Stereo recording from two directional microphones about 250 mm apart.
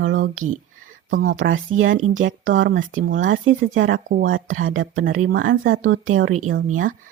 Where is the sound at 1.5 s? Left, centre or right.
Right.